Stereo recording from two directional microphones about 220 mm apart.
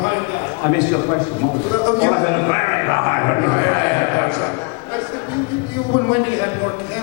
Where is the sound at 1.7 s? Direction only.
20° left (ahead or behind).